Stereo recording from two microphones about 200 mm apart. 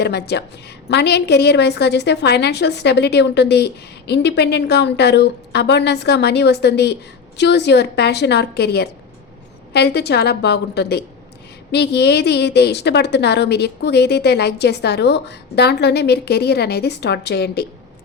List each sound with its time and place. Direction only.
0.0 s a woman's voice: 55° left (ahead or behind)